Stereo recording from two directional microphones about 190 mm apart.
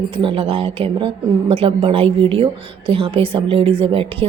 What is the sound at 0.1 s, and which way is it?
A woman's voice, 25° right (ahead or behind).